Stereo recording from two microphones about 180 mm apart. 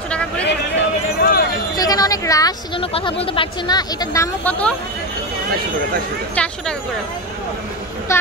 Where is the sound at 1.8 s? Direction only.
20° left (ahead or behind).